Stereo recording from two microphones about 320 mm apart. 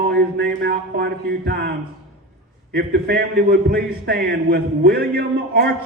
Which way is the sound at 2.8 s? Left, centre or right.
Right.